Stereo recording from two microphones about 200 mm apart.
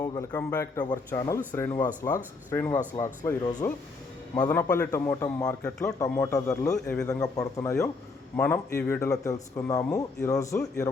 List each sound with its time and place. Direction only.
0.0 s a man's voice: 15° left (ahead or behind)